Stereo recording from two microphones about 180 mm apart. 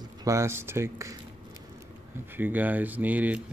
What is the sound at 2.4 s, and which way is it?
Speech, 10° right (ahead or behind).